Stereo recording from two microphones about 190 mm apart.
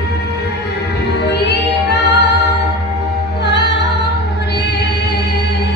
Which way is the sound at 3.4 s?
65° left (ahead or behind).